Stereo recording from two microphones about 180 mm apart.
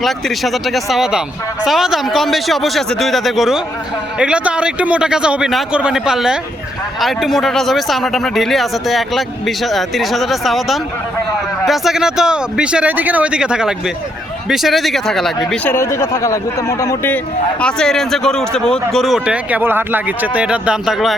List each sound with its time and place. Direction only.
0.0 s speech: centre (ahead or behind)
15.7 s speech: 15° left (ahead or behind); by 21.2 s centre (ahead or behind)